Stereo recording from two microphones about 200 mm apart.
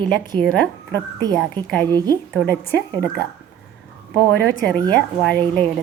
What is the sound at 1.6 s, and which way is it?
A woman's voice, 5° left (ahead or behind).